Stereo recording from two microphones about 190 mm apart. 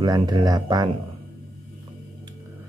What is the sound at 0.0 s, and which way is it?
Speech, 20° right (ahead or behind).